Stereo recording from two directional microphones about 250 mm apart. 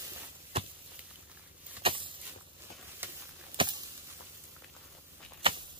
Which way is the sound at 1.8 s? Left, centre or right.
Centre.